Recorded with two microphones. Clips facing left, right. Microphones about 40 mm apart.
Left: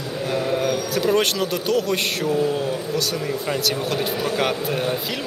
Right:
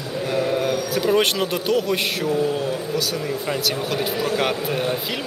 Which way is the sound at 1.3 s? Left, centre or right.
Centre.